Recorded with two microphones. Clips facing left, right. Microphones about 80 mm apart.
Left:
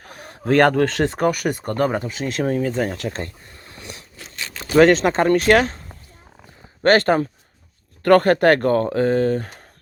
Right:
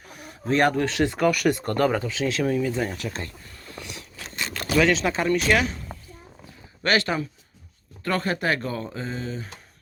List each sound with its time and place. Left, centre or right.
0.0 s a sound: left
1.2 s speech: left
1.6 s speech: left
4.7 s speech: left
6.8 s speech: left
8.0 s speech: left